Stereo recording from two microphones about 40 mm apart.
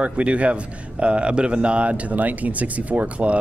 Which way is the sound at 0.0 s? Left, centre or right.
Right.